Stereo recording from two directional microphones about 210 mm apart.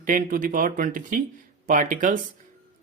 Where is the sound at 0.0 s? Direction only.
40° right (ahead or behind).